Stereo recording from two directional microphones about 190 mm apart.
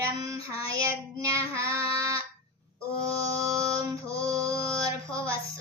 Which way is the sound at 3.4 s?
15° right (ahead or behind).